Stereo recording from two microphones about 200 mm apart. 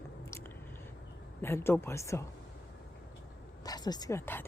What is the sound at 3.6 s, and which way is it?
Speech, 20° left (ahead or behind).